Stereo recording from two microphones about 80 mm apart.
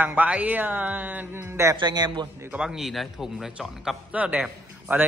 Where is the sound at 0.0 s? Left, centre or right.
Right.